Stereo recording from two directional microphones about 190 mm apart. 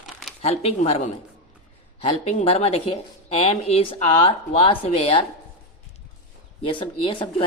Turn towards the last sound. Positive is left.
turn(degrees=25)  # may be behind; listen again after turning